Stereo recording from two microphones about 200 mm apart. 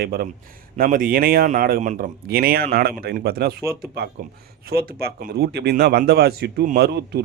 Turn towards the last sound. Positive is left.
turn(degrees=-55)  # may be behind; listen again after turning